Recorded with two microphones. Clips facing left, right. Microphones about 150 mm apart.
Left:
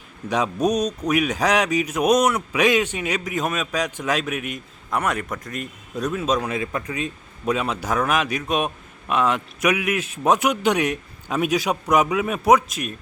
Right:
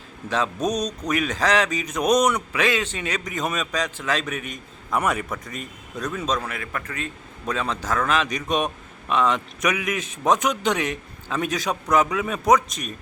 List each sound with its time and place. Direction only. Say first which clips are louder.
0.3 s a man's voice: left 3 dB; 15° left (ahead or behind)